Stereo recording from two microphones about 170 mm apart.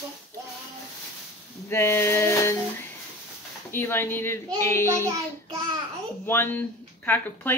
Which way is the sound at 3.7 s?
15° left (ahead or behind).